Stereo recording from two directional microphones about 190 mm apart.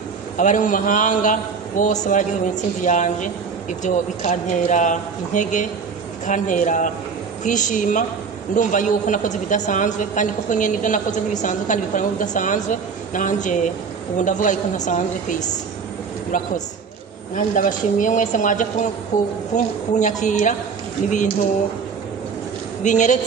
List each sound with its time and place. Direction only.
0.4 s a man's voice: 40° left (ahead or behind)
17.6 s a man's voice: 45° left (ahead or behind)
19.1 s a woman's voice: 15° left (ahead or behind)
19.5 s a man's voice: 40° left (ahead or behind)
22.8 s a man's voice: 40° left (ahead or behind)